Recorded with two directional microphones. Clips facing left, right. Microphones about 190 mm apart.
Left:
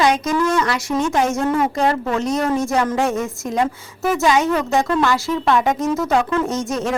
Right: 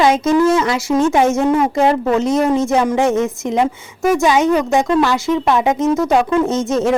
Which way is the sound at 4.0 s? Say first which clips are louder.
Right 4 dB; centre (ahead or behind).